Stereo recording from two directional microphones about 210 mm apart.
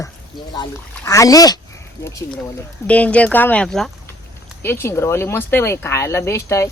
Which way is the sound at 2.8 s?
5° left (ahead or behind).